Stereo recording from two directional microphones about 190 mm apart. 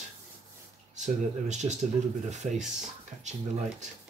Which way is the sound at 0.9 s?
40° right (ahead or behind).